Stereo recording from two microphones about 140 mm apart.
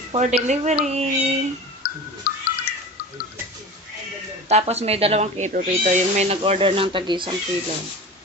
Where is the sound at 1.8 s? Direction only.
90° left.